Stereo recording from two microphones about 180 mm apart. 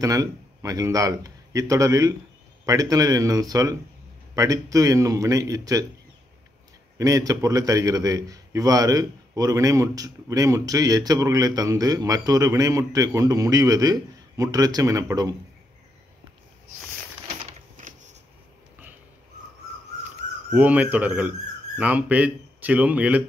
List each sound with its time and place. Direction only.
0.0 s a man's voice: 20° right (ahead or behind)
7.0 s a man's voice: 20° right (ahead or behind)
17.7 s a sound: 45° right (ahead or behind)
20.5 s speech: 10° right (ahead or behind)